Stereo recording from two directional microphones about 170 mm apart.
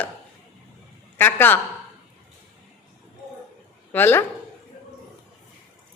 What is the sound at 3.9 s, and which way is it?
Speech, 15° left (ahead or behind).